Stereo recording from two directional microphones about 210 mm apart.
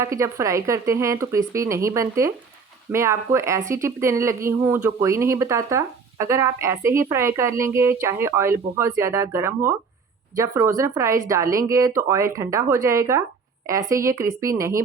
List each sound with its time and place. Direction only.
0.0 s speech: 15° right (ahead or behind)